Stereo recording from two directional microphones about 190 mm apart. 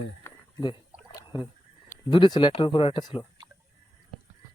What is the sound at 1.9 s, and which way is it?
Speech, 25° left (ahead or behind).